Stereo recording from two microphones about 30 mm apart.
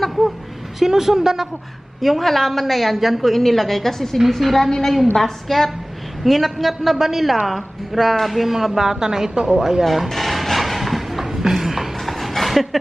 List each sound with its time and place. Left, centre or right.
0.8 s a man's voice: centre
2.0 s a woman's voice: centre
6.2 s a man's voice: centre
9.8 s a sound: centre